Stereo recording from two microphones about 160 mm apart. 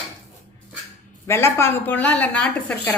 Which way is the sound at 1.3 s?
15° left (ahead or behind).